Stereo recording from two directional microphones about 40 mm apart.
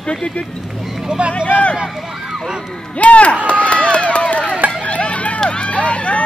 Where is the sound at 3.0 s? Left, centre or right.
Left.